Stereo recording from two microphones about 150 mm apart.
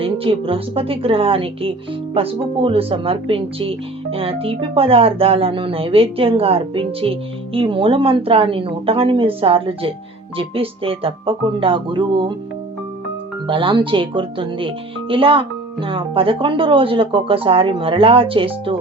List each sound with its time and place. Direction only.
0.0 s speech: 40° right (ahead or behind)
13.5 s speech: 35° right (ahead or behind)